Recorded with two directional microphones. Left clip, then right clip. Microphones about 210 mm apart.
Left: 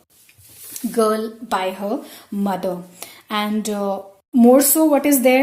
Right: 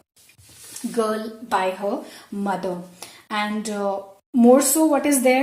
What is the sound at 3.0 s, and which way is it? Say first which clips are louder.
Speech: left 2 dB; 35° left (ahead or behind).